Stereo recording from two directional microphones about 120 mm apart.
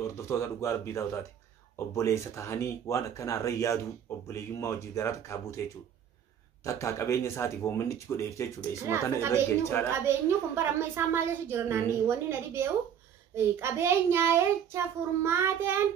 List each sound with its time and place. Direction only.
0.0 s speech: 20° left (ahead or behind)
6.6 s speech: 25° left (ahead or behind)
8.5 s a woman's voice: 20° right (ahead or behind)